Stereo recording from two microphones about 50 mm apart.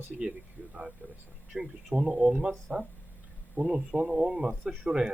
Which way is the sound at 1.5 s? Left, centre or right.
Centre.